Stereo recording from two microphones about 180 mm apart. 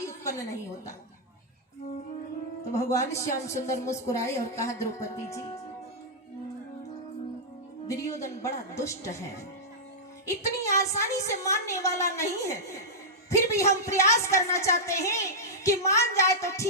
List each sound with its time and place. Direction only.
0.0 s a woman's voice: 15° left (ahead or behind)
2.7 s a woman's voice: 15° left (ahead or behind)
7.9 s a woman's voice: 15° left (ahead or behind)
10.2 s a woman's voice: 15° left (ahead or behind)